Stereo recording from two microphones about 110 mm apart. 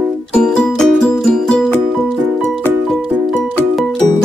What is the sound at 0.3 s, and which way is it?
Music, 5° left (ahead or behind).